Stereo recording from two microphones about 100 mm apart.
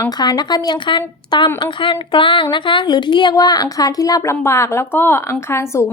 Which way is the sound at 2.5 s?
55° left (ahead or behind).